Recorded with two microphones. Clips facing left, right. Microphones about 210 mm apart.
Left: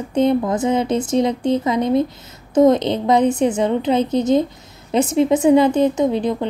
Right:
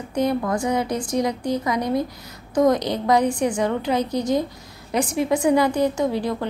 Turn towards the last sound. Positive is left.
turn(degrees=20)  # may be behind; listen again after turning